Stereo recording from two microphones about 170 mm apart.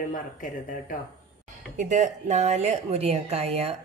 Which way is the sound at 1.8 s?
45° right (ahead or behind).